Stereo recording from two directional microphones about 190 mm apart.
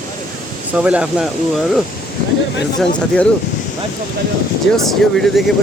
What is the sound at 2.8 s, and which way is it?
Speech, 5° left (ahead or behind).